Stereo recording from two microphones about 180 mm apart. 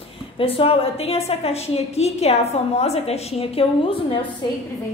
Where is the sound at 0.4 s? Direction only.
30° left (ahead or behind).